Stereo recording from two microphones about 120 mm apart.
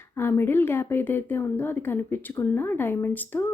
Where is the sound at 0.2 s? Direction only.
20° left (ahead or behind).